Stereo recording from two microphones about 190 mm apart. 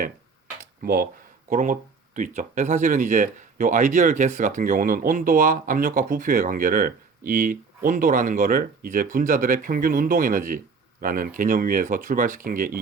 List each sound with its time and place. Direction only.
0.8 s speech: 50° right (ahead or behind)